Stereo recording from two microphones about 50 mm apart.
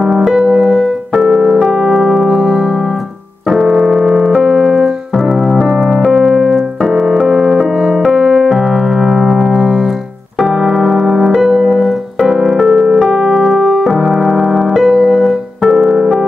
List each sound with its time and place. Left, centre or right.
0.0 s music: centre
0.3 s music: centre
1.2 s keyboard: centre
3.4 s keyboard: centre
4.4 s piano: centre
5.1 s keyboard: centre
5.7 s music: centre
6.1 s keyboard: centre
7.2 s music: centre
7.7 s piano: centre
12.6 s keyboard: centre
14.9 s music: centre